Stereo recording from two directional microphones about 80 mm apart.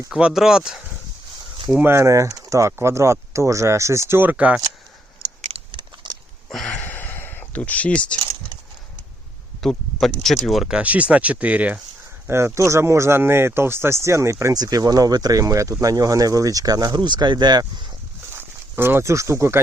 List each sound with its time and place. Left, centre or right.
0.1 s speech: centre
1.8 s speech: right; by 4.6 s centre
5.7 s a sound: right
6.5 s a sound: centre
6.8 s a sound: left
9.6 s speech: centre
10.8 s speech: centre
12.5 s speech: right
14.5 s speech: right
17.0 s speech: right
18.8 s speech: right